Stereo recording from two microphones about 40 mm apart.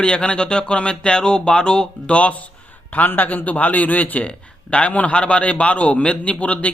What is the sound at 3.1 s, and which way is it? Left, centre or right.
Speech, left.